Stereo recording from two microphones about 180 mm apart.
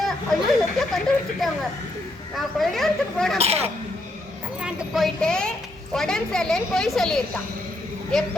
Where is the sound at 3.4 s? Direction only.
35° right (ahead or behind).